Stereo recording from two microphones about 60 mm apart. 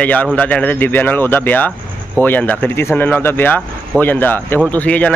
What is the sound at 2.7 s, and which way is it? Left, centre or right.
Speech, left.